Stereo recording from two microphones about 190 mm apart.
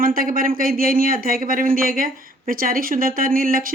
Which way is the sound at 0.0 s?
50° right (ahead or behind).